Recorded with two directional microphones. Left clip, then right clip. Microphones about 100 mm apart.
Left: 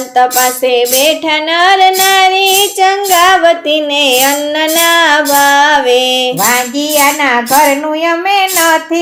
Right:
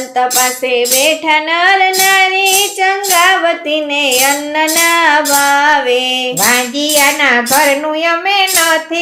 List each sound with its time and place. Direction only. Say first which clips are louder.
0.2 s music: left 4 dB; 30° left (ahead or behind)
6.4 s music: left 1 dB; 15° left (ahead or behind)
8.0 s a sound: left 2 dB; 20° left (ahead or behind)